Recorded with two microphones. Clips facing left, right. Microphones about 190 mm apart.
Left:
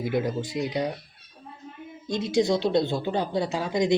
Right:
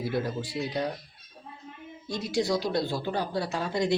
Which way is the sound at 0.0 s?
20° left (ahead or behind).